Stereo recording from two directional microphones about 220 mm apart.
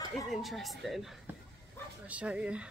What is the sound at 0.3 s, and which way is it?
Speech, centre (ahead or behind).